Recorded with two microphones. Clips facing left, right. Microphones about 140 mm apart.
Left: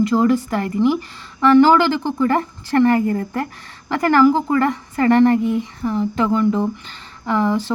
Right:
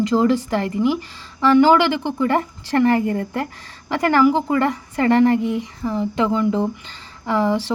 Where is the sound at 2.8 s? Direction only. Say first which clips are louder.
Even; 30° right (ahead or behind).